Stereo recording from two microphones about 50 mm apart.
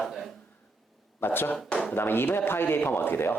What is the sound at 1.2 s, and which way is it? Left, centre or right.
Speech, left.